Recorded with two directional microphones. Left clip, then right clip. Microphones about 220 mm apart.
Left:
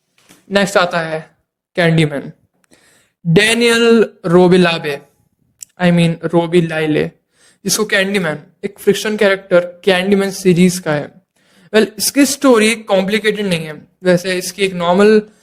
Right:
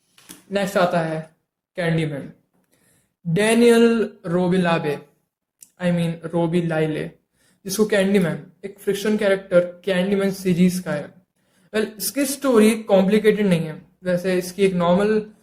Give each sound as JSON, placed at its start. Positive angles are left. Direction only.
{"t": 0.5, "sound": "speech", "side_deg": 45}
{"t": 3.3, "sound": "a man's voice", "side_deg": 45}